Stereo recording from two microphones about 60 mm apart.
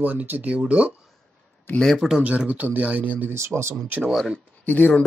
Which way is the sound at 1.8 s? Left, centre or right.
Centre.